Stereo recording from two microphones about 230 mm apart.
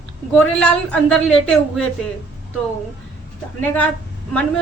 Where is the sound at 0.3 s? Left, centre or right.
Centre.